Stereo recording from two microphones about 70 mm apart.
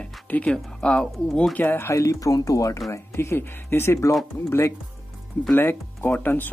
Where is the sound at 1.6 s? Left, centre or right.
Left.